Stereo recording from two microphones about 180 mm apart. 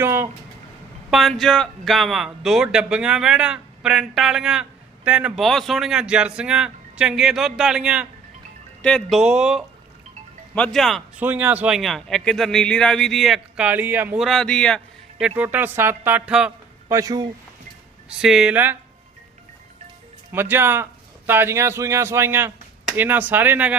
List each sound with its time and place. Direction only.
0.0 s a sound: 15° right (ahead or behind)
1.1 s speech: centre (ahead or behind)
11.2 s speech: 10° right (ahead or behind)
14.3 s speech: 5° left (ahead or behind)
15.4 s speech: 10° right (ahead or behind)
16.9 s speech: 20° right (ahead or behind)
18.2 s speech: 5° right (ahead or behind)
20.3 s speech: 10° right (ahead or behind)